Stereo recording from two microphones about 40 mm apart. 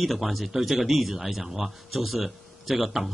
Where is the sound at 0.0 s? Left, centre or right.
Centre.